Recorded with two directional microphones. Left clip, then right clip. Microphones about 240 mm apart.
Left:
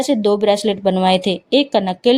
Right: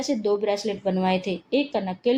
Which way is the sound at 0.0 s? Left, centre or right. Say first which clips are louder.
Left 9 dB; left.